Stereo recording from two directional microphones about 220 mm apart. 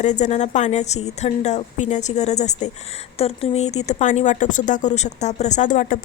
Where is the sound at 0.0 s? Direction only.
35° left (ahead or behind).